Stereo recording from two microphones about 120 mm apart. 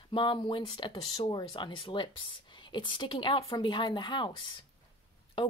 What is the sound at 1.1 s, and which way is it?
A woman's voice, 40° left (ahead or behind).